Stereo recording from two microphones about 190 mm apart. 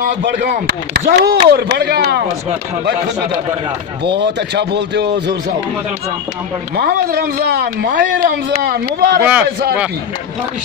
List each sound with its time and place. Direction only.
0.2 s speech: 65° right (ahead or behind)
4.0 s speech: 65° right (ahead or behind)
6.8 s speech: 55° right (ahead or behind)
9.2 s a man's voice: 5° right (ahead or behind)